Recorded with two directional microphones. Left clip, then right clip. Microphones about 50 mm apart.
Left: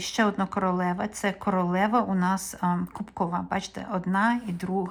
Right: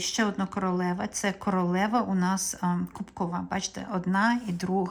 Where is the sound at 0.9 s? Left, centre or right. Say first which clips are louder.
Left 2 dB; centre.